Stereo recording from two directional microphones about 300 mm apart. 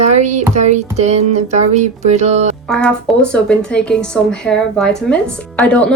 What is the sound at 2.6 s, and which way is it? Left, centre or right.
A woman's voice, centre.